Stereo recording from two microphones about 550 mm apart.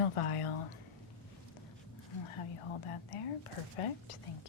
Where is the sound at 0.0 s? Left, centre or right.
Left.